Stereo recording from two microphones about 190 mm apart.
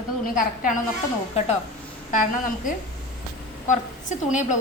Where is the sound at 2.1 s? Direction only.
45° left (ahead or behind).